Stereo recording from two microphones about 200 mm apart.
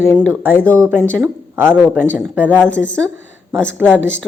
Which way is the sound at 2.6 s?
5° left (ahead or behind).